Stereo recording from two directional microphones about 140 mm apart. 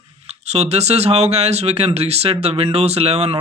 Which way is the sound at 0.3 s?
50° right (ahead or behind).